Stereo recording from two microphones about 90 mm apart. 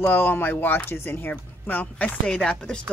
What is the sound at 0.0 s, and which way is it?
Speech, 20° left (ahead or behind).